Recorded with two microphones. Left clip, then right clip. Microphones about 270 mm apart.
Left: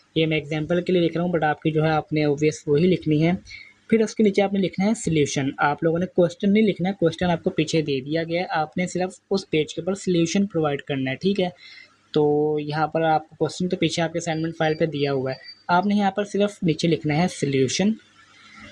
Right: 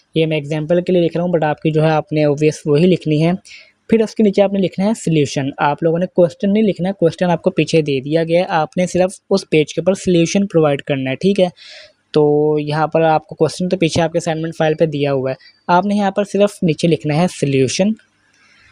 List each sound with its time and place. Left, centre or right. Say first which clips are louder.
0.1 s speech: right 6 dB; right